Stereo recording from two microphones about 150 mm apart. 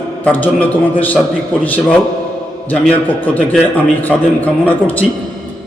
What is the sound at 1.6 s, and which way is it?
A man's voice, 10° left (ahead or behind).